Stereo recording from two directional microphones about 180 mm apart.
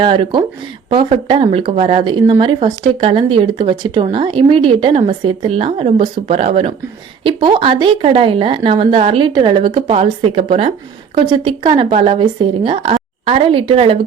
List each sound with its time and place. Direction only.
0.0 s speech: 30° right (ahead or behind)